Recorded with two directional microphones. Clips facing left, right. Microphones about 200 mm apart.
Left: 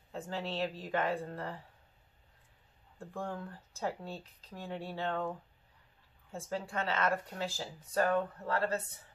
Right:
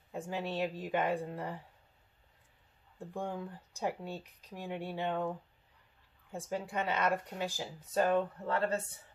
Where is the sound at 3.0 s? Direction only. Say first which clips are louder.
Right 1 dB; 15° right (ahead or behind).